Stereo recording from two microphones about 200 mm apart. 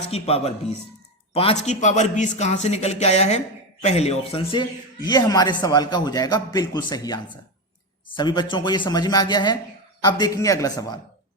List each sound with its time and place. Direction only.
0.1 s a man's voice: 30° left (ahead or behind)